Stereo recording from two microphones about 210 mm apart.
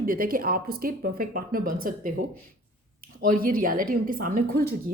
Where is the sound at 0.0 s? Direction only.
45° right (ahead or behind).